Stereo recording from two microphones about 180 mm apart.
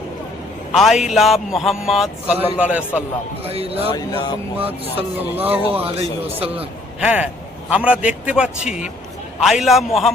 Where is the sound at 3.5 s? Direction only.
35° right (ahead or behind).